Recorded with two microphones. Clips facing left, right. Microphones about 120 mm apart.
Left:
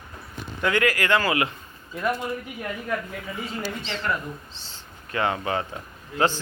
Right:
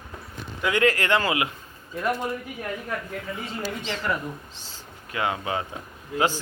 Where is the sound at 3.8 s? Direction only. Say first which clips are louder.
Right 1 dB; 10° right (ahead or behind).